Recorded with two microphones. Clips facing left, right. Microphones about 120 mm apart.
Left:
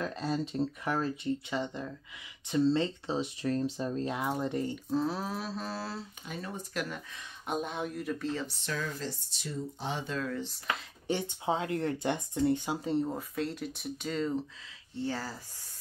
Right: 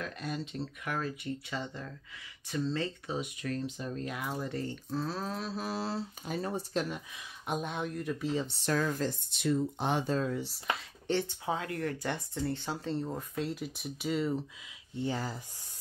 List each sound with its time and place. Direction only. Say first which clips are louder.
0.0 s speech: left 5 dB; 30° left (ahead or behind)
1.5 s speech: left 4 dB; 20° left (ahead or behind)
5.6 s speech: right 2 dB; 15° right (ahead or behind)
6.2 s speech: right 6 dB; 35° right (ahead or behind)
7.4 s speech: left 1 dB; centre (ahead or behind)
8.2 s speech: right 4 dB; 15° right (ahead or behind)
8.6 s speech: right 8 dB; 50° right (ahead or behind)
10.0 s speech: right 4 dB; 30° right (ahead or behind)
10.3 s speech: right 1 dB; 5° right (ahead or behind)
11.1 s speech: left 1 dB; 15° left (ahead or behind)
13.3 s speech: left 1 dB; centre (ahead or behind)
15.0 s speech: right 1 dB; 15° right (ahead or behind)